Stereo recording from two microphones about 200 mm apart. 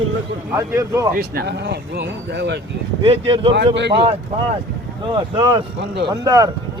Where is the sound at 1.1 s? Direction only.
55° right (ahead or behind).